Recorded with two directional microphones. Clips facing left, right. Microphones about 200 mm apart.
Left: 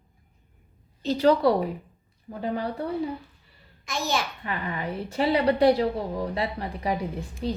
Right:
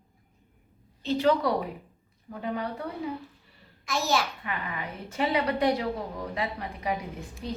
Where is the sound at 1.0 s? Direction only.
35° left (ahead or behind).